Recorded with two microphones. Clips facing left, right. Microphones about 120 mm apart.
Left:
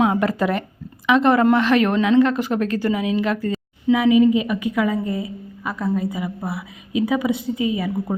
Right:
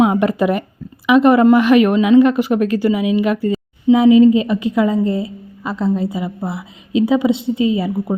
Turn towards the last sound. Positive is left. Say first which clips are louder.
# right 5 dB
turn(degrees=-25)  # may be behind; listen again after turning